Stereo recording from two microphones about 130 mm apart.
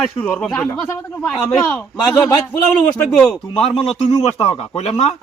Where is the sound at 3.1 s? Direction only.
10° left (ahead or behind).